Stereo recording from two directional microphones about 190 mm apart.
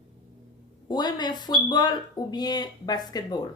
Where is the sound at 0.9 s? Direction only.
20° left (ahead or behind).